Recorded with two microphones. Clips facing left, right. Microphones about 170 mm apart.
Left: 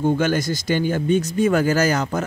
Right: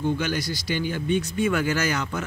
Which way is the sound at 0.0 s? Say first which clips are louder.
Left 6 dB; 50° left (ahead or behind).